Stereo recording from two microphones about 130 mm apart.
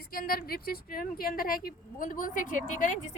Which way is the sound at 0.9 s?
90° left.